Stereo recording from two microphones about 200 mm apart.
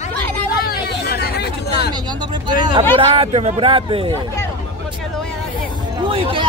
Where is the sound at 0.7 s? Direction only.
50° left (ahead or behind).